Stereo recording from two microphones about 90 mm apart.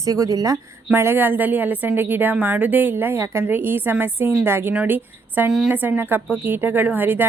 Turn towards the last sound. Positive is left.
turn(degrees=-20)  # may be behind; listen again after turning